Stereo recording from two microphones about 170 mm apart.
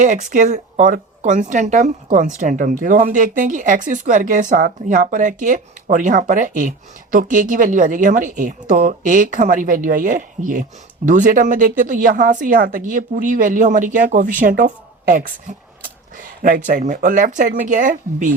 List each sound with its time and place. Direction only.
0.0 s a woman's voice: 50° right (ahead or behind)